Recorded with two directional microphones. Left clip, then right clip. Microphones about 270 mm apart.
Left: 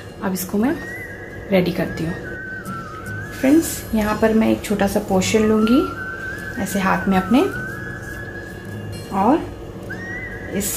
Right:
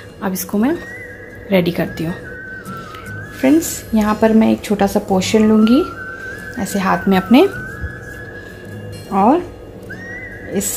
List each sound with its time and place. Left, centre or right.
0.2 s speech: right
3.4 s speech: right
6.6 s speech: right
9.1 s speech: right
10.5 s speech: right